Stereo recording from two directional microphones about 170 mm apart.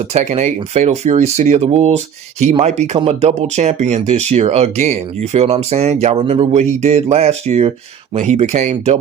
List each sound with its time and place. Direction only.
0.1 s speech: 40° right (ahead or behind)